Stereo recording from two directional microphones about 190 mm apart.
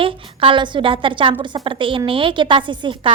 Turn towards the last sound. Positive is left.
turn(degrees=-25)  # may be behind; listen again after turning